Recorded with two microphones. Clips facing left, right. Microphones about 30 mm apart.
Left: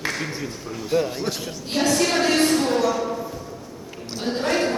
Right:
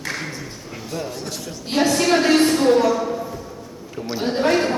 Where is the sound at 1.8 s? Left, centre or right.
Centre.